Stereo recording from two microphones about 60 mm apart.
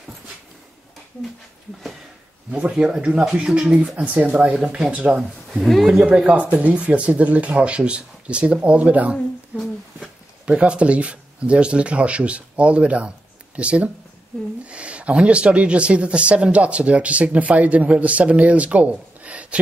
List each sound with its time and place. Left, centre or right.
2.5 s speech: centre
3.9 s speech: right
5.5 s speech: centre
6.0 s speech: centre
9.5 s a sound: right
9.9 s speech: centre